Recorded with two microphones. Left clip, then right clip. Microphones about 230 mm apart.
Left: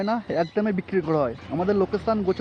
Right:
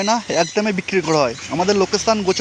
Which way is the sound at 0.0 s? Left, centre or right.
Centre.